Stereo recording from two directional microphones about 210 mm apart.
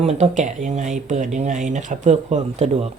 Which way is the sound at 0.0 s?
30° right (ahead or behind).